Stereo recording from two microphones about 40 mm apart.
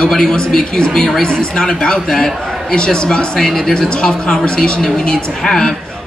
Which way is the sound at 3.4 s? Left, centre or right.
Centre.